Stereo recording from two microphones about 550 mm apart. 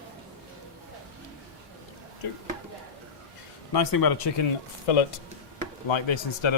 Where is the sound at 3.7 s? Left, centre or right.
Left.